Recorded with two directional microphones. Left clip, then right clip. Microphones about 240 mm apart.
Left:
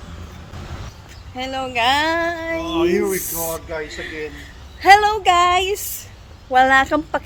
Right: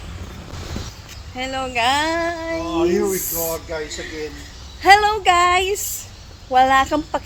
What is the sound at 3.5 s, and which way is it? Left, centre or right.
A woman's voice, centre.